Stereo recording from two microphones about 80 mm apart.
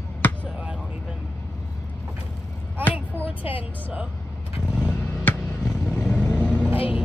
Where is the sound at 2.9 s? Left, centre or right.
Right.